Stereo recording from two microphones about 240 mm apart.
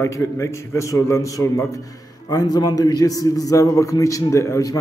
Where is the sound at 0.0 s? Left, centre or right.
Centre.